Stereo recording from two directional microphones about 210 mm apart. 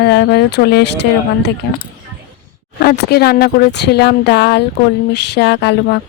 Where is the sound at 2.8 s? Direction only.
45° left (ahead or behind).